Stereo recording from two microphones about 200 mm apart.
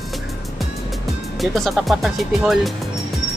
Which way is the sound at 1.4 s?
Centre (ahead or behind).